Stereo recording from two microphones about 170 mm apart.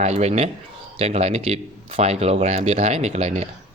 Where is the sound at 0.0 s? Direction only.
40° right (ahead or behind).